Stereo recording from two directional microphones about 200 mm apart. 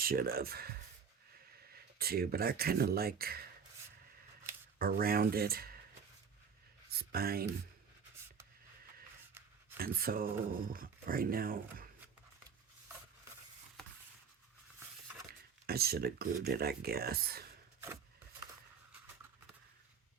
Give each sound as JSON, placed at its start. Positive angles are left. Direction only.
{"t": 0.0, "sound": "speech", "side_deg": -45}
{"t": 2.0, "sound": "speech", "side_deg": -50}
{"t": 4.8, "sound": "speech", "side_deg": -50}
{"t": 7.0, "sound": "speech", "side_deg": -50}
{"t": 9.7, "sound": "speech", "side_deg": -50}
{"t": 15.3, "sound": "speech", "side_deg": -50}